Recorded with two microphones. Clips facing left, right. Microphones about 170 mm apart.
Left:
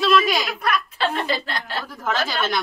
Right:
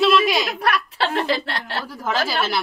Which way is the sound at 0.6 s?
70° right (ahead or behind).